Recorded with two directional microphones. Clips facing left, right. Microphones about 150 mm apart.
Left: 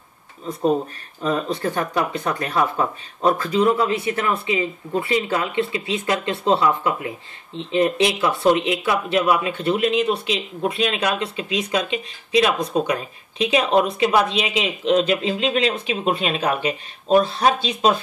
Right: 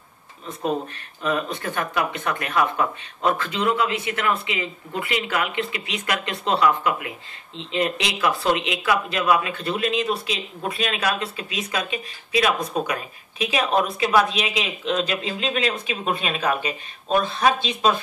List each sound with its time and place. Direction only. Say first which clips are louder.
0.5 s speech: left 6 dB; 15° left (ahead or behind)
1.2 s speech: left 3 dB; 35° left (ahead or behind)